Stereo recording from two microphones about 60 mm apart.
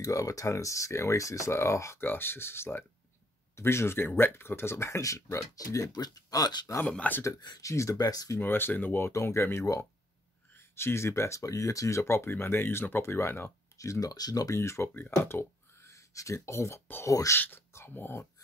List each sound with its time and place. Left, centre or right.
0.0 s speech: left
2.0 s speech: left
7.0 s speech: left
7.2 s speech: left
8.4 s speech: left
9.1 s speech: left
13.7 s speech: left
14.5 s speech: left
15.0 s speech: left
15.9 s speech: left
17.0 s speech: left
17.4 s speech: left